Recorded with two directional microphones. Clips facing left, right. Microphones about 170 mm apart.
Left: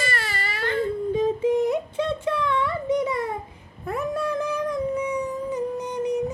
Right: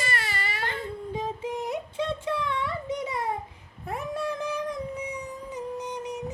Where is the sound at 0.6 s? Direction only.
50° left (ahead or behind).